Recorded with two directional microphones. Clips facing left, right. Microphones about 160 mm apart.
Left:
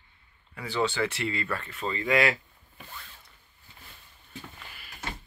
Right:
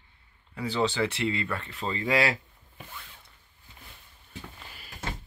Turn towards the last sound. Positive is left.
turn(degrees=-30)  # may be behind; listen again after turning